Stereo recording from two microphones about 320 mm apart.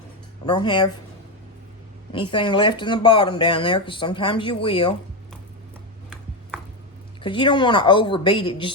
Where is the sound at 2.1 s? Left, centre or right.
Centre.